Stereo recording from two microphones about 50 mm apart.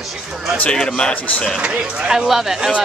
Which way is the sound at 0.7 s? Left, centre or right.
Centre.